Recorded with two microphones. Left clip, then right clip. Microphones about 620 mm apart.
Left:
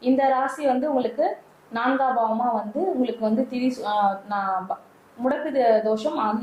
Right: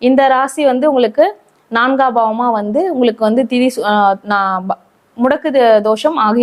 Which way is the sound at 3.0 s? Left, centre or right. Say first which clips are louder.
Right 12 dB; right.